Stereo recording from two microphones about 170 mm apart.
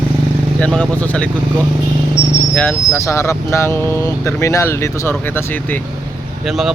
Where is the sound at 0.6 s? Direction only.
10° left (ahead or behind).